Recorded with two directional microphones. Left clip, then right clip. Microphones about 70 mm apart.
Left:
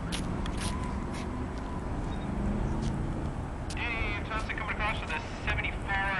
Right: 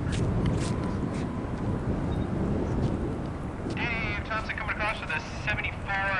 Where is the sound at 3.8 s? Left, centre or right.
Right.